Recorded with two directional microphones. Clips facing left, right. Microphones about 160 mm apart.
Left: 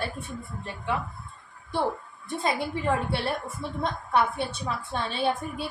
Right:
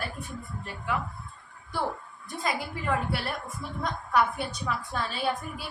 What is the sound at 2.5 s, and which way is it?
A woman's voice, 25° left (ahead or behind).